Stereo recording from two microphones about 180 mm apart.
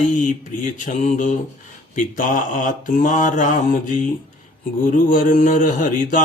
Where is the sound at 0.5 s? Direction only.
45° left (ahead or behind).